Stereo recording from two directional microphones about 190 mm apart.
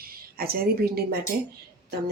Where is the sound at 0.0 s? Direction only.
50° right (ahead or behind).